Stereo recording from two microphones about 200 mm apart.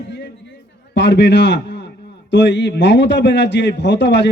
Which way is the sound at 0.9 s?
60° left (ahead or behind).